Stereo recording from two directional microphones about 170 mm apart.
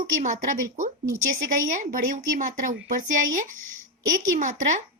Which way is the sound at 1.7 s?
50° right (ahead or behind).